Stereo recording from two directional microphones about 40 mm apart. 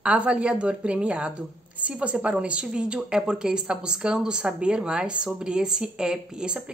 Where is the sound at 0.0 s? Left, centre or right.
Right.